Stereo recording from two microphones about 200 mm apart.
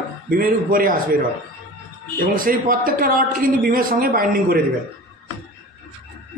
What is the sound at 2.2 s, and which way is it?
A man's voice, 45° right (ahead or behind).